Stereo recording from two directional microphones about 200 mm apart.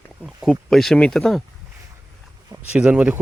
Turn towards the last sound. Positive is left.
turn(degrees=-5)  # may be behind; listen again after turning